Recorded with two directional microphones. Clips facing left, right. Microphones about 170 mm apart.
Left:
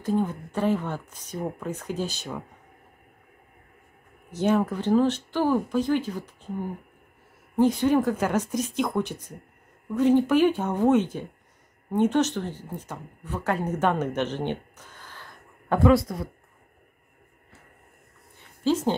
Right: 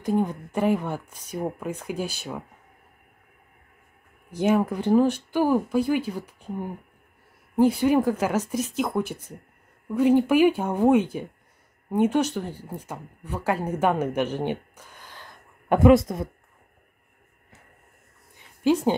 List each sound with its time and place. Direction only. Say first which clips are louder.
0.0 s speech: right 1 dB; 15° right (ahead or behind)
4.3 s speech: right 1 dB; 10° right (ahead or behind)
7.5 s speech: right 1 dB; 10° right (ahead or behind)
18.6 s speech: right 3 dB; 15° right (ahead or behind)